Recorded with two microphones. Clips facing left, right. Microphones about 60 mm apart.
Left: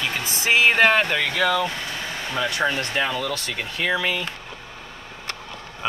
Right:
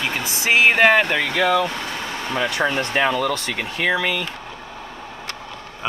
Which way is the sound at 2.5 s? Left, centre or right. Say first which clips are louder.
Right 3 dB; right.